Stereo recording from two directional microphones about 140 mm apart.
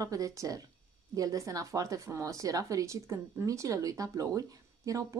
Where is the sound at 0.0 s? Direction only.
25° right (ahead or behind).